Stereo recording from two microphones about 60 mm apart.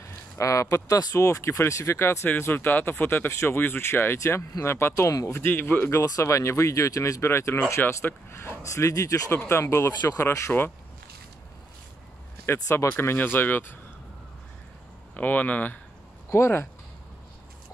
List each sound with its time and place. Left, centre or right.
0.4 s speech: left
2.4 s speech: left
3.3 s speech: left
3.5 s speech: left
5.0 s speech: left
5.3 s speech: left
5.9 s speech: left
9.5 s speech: left
10.5 s speech: centre
12.5 s speech: left
15.1 s speech: left
16.3 s speech: left